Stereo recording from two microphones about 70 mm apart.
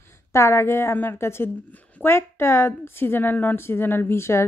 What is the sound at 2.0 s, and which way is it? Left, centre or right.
A woman's voice, left.